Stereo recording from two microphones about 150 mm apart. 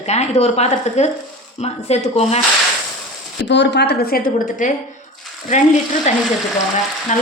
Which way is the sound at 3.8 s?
90° left.